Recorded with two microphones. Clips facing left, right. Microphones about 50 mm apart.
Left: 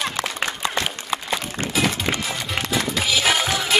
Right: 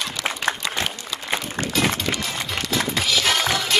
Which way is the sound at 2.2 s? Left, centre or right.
Centre.